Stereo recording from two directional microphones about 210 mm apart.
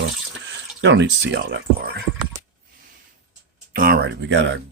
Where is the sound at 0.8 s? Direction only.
60° right (ahead or behind).